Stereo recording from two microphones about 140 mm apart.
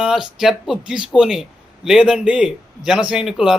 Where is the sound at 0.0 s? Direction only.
5° right (ahead or behind).